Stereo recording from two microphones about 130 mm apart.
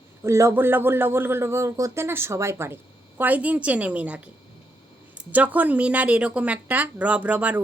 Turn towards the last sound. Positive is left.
turn(degrees=-10)  # may be behind; listen again after turning